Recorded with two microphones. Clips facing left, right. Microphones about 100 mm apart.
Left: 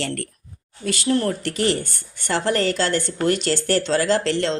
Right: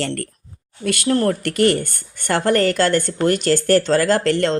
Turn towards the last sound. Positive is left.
turn(degrees=-50)  # may be behind; listen again after turning